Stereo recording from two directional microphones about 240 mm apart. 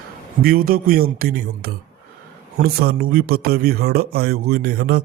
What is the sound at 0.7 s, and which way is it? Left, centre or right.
Speech, right.